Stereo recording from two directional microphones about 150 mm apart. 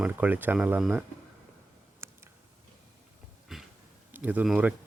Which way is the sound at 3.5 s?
Centre (ahead or behind).